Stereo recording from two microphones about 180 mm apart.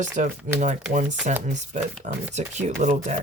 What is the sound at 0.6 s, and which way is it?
Speech, 45° right (ahead or behind).